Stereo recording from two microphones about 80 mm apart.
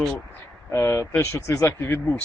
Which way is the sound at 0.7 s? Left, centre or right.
Left.